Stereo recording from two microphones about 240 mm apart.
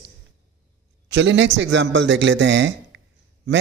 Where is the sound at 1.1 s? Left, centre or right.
Right.